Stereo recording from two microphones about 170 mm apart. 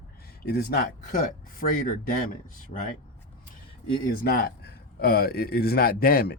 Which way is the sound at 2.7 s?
50° left (ahead or behind).